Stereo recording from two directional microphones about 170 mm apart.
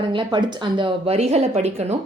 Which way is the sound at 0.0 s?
30° right (ahead or behind).